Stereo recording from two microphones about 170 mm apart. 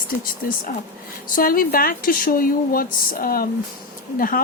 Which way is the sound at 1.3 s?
55° left (ahead or behind).